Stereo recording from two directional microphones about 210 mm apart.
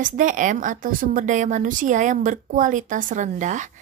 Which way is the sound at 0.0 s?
35° right (ahead or behind).